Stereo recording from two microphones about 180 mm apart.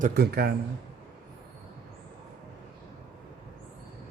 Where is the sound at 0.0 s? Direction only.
60° right (ahead or behind).